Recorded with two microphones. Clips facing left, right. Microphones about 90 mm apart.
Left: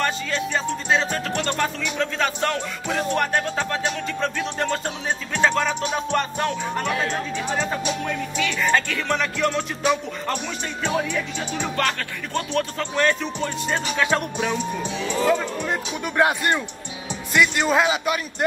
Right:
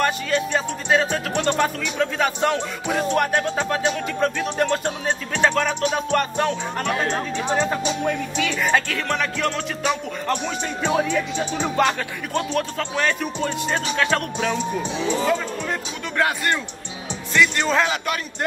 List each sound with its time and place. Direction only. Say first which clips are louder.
0.0 s music: right 3 dB; 10° right (ahead or behind)
1.5 s speech: right 3 dB; 15° right (ahead or behind)
4.6 s music: right 3 dB; 5° left (ahead or behind)
5.5 s speech: right 1 dB; 5° left (ahead or behind)
5.9 s music: right 2 dB; 5° right (ahead or behind)
7.1 s speech: right 3 dB; 20° right (ahead or behind)
8.4 s speech: left 1 dB; 10° right (ahead or behind)
8.8 s music: even; centre (ahead or behind)
10.3 s speech: right 7 dB; 20° right (ahead or behind)
12.4 s music: right 1 dB; 5° right (ahead or behind)
13.9 s speech: left 1 dB; 10° left (ahead or behind)